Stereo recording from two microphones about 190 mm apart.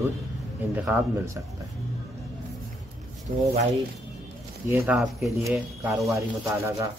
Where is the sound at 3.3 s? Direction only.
45° right (ahead or behind).